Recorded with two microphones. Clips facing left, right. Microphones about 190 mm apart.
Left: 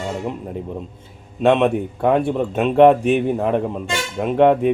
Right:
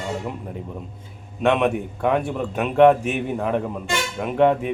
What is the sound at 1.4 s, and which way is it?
A man's voice, 30° left (ahead or behind).